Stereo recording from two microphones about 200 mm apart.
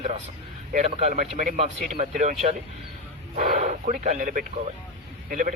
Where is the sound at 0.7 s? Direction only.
30° right (ahead or behind).